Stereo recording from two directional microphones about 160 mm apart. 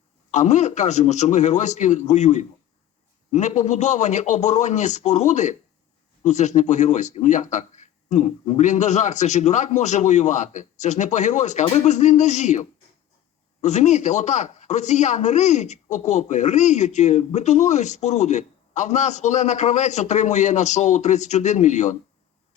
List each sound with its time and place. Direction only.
0.3 s speech: 45° left (ahead or behind)
11.6 s speech: 35° left (ahead or behind)